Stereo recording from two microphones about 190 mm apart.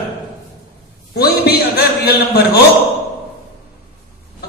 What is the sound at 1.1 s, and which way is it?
A man's voice, 55° left (ahead or behind).